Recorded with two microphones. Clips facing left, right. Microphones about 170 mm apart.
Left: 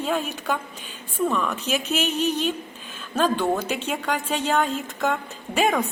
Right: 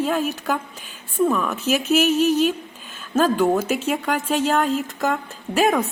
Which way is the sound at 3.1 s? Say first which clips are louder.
Right 4 dB; 5° right (ahead or behind).